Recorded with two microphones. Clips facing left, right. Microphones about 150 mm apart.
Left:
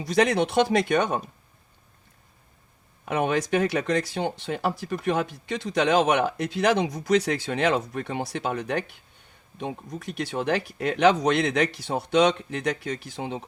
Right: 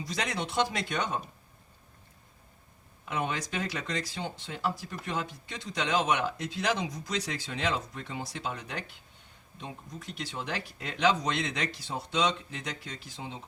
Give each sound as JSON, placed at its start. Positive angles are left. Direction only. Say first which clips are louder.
{"t": 0.0, "sound": "speech", "louder": "left 12 dB", "side_deg": 65}
{"t": 3.1, "sound": "speech", "louder": "left 9 dB", "side_deg": 65}